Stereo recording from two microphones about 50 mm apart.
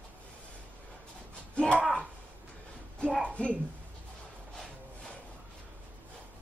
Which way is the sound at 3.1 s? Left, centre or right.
Right.